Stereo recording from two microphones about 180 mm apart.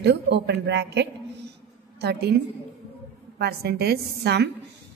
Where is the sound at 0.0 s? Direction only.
70° right (ahead or behind).